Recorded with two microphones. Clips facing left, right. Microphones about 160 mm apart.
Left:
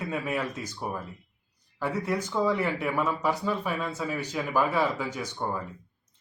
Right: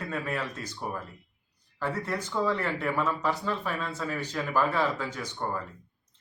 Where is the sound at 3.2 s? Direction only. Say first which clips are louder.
Left 2 dB; 15° left (ahead or behind).